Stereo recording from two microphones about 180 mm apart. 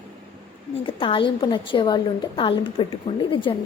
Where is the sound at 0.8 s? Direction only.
30° left (ahead or behind).